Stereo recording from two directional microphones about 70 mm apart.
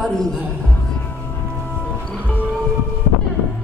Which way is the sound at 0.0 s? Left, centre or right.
Centre.